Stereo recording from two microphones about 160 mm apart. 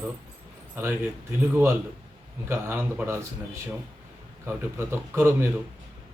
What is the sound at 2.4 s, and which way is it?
Speech, 15° right (ahead or behind).